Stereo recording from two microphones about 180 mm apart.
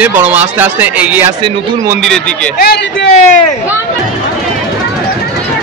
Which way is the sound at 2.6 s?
60° left (ahead or behind).